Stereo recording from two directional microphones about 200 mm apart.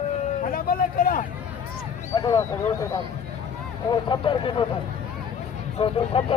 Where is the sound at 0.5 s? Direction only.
45° left (ahead or behind).